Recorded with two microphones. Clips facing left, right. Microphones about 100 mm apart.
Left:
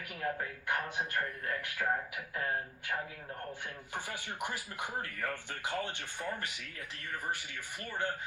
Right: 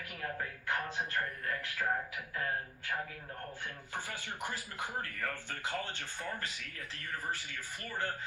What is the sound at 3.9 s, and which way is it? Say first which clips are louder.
A woman's voice: left 1 dB; 20° left (ahead or behind).